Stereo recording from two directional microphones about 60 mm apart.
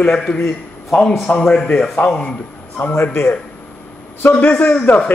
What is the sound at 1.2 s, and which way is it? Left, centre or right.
A man's voice, centre.